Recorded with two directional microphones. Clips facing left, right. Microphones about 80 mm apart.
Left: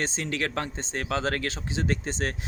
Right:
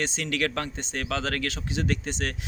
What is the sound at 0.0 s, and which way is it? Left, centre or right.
Speech, left.